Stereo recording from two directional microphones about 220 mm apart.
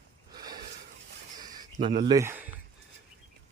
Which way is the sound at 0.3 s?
20° right (ahead or behind).